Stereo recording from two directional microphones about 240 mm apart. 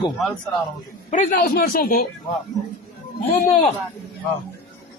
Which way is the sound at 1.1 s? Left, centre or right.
Left.